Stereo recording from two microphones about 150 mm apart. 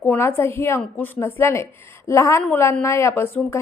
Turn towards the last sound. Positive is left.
turn(degrees=15)  # may be behind; listen again after turning